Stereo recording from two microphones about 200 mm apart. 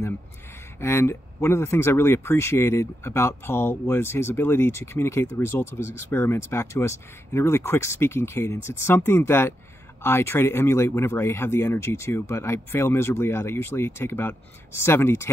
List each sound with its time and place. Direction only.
0.7 s speech: 10° left (ahead or behind)